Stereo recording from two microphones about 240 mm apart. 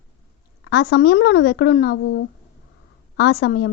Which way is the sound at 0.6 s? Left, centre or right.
Left.